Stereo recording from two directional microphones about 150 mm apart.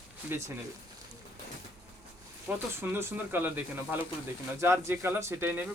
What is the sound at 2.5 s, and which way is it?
Speech, 10° right (ahead or behind).